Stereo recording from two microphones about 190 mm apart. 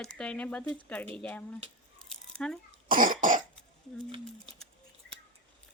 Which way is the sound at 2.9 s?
45° right (ahead or behind).